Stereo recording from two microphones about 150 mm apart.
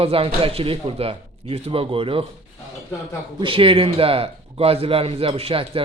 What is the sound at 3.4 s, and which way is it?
A man's voice, 35° right (ahead or behind).